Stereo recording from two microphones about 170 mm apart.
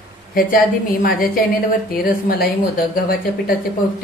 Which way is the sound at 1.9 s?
60° left (ahead or behind).